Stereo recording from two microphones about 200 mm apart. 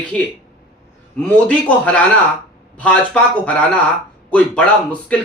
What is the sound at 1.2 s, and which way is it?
A man's voice, 5° left (ahead or behind).